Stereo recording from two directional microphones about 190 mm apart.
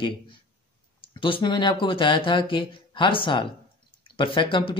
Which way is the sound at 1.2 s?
25° left (ahead or behind).